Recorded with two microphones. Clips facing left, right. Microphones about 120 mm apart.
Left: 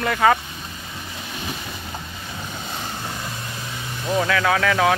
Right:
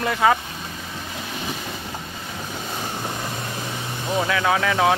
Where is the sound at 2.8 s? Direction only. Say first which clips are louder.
Right 3 dB; 20° right (ahead or behind).